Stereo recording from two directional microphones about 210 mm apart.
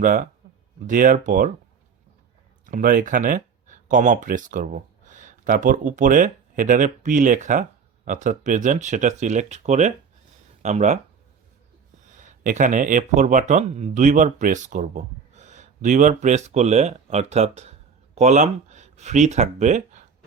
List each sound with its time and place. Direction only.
0.0 s speech: 40° right (ahead or behind)
2.6 s speech: 40° right (ahead or behind)
12.1 s speech: 35° right (ahead or behind)